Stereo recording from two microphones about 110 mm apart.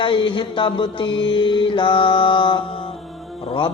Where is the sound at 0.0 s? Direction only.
50° left (ahead or behind).